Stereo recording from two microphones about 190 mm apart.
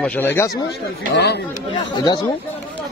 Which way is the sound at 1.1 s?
60° left (ahead or behind).